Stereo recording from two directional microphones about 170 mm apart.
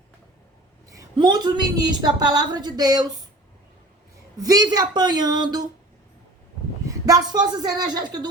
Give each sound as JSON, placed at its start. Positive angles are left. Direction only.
{"t": 0.9, "sound": "a woman's voice", "side_deg": -20}
{"t": 4.4, "sound": "a woman's voice", "side_deg": -20}
{"t": 6.8, "sound": "a woman's voice", "side_deg": -20}